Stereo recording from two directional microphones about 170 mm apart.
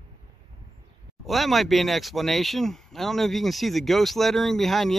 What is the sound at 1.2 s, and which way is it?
Speech, centre (ahead or behind).